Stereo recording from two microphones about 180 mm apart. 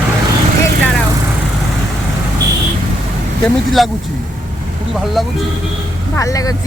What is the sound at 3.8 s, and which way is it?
Speech, centre (ahead or behind).